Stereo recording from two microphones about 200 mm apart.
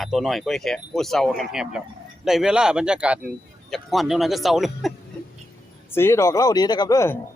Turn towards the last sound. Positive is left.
turn(degrees=15)  # may be behind; listen again after turning